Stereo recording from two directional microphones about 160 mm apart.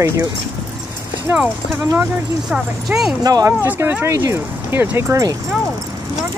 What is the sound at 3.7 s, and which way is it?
Speech, 10° right (ahead or behind).